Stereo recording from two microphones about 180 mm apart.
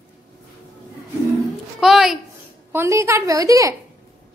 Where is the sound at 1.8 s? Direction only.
Centre (ahead or behind).